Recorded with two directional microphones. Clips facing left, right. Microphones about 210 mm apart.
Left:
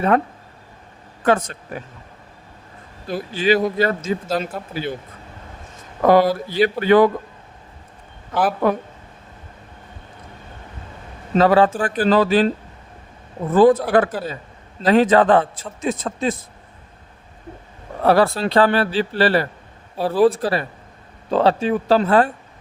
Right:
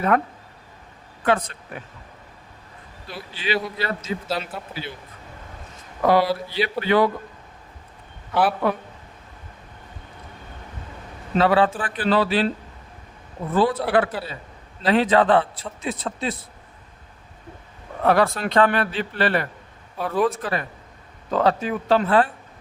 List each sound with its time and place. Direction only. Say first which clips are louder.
1.2 s speech: left 4 dB; 45° left (ahead or behind)
3.1 s a man's voice: left 9 dB; 45° left (ahead or behind)
6.0 s a man's voice: left 4 dB; 45° left (ahead or behind)
8.3 s a man's voice: left 2 dB; 45° left (ahead or behind)
11.3 s a man's voice: left 4 dB; 40° left (ahead or behind)
13.5 s a man's voice: left 7 dB; 45° left (ahead or behind)
18.0 s a man's voice: left 3 dB; 35° left (ahead or behind)